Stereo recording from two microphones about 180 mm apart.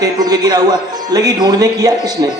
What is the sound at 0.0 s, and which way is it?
Speech, 20° right (ahead or behind).